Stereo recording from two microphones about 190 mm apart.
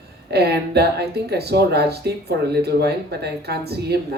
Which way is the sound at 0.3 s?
60° right (ahead or behind).